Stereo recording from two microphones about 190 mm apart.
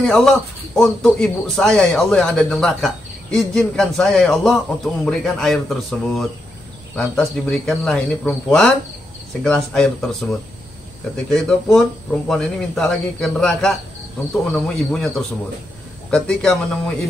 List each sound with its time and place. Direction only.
0.0 s speech: 5° left (ahead or behind)
16.1 s speech: 5° left (ahead or behind)